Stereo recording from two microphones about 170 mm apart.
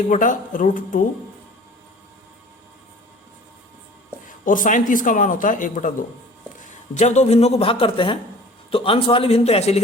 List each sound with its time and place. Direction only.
0.1 s speech: 50° left (ahead or behind)
4.3 s a man's voice: 50° left (ahead or behind)